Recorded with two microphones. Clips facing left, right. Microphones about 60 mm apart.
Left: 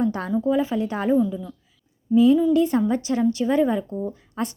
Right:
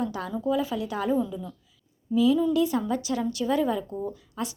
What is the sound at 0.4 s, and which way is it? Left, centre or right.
Speech, left.